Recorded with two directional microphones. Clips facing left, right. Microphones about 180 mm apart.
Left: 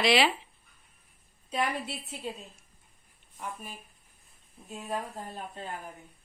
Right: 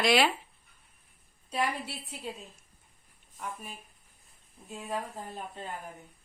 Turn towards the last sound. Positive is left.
turn(degrees=10)  # may be behind; listen again after turning